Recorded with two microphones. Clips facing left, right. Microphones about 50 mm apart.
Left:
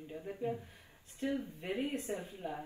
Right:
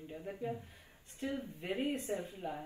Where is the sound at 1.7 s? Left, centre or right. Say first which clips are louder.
Right 1 dB; right.